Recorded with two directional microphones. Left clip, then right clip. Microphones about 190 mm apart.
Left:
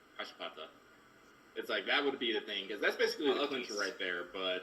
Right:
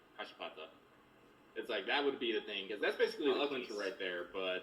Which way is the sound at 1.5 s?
45° left (ahead or behind).